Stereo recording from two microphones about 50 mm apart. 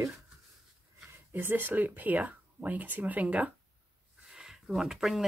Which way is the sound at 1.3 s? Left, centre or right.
Right.